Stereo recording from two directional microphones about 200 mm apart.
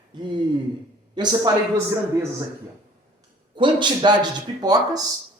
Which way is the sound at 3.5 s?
25° right (ahead or behind).